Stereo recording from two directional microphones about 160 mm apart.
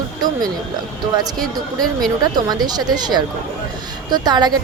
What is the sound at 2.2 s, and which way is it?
Speech, 25° right (ahead or behind).